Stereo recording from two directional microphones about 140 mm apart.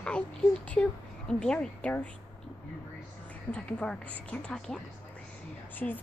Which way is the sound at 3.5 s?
10° left (ahead or behind).